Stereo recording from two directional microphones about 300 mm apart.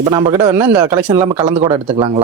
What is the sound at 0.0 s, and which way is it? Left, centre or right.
Speech, centre.